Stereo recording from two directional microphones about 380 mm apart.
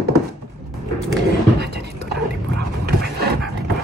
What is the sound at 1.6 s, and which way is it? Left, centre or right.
Dog, right.